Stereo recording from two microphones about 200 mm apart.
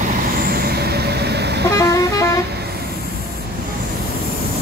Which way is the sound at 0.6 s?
50° right (ahead or behind).